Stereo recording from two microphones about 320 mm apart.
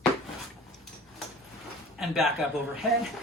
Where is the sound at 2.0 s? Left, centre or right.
Centre.